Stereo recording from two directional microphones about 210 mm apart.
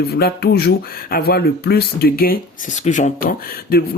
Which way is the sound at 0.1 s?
45° left (ahead or behind).